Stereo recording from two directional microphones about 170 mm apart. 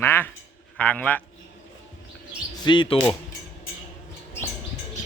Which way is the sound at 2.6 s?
30° left (ahead or behind).